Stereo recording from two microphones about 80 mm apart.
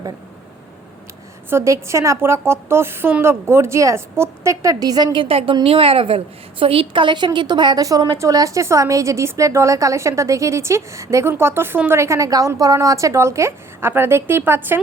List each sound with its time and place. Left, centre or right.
1.5 s a woman's voice: right
5.1 s a woman's voice: right
7.8 s a woman's voice: right